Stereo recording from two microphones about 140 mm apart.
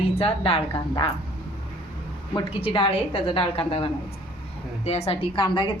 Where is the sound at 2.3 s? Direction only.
40° left (ahead or behind).